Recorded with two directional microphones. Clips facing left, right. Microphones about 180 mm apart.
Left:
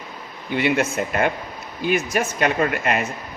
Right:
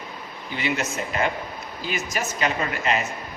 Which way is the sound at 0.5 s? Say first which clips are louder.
Left 7 dB; 55° left (ahead or behind).